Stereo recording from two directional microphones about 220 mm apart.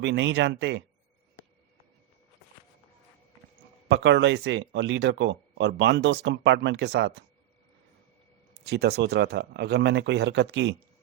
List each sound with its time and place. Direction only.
0.0 s speech: 55° right (ahead or behind)
3.8 s speech: 50° right (ahead or behind)
8.6 s speech: 50° right (ahead or behind)